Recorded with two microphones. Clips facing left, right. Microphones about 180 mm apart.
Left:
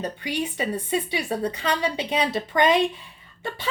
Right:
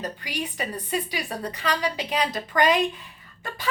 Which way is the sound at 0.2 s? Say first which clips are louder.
Left 4 dB; 25° left (ahead or behind).